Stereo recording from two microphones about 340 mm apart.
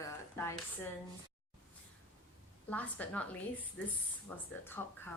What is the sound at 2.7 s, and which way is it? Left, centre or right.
A woman's voice, centre.